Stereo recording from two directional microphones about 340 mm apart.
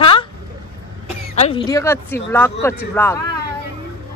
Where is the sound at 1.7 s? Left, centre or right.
Centre.